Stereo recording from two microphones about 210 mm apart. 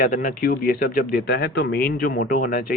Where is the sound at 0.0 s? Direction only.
40° left (ahead or behind).